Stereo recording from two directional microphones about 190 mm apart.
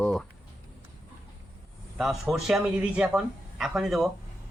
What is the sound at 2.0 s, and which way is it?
A man's voice, centre (ahead or behind).